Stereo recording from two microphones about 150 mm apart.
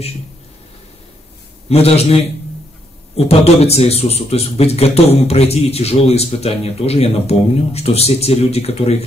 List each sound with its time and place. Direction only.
1.7 s speech: 45° left (ahead or behind)
3.2 s speech: 45° left (ahead or behind)